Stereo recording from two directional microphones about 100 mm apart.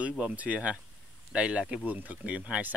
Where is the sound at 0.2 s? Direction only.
15° right (ahead or behind).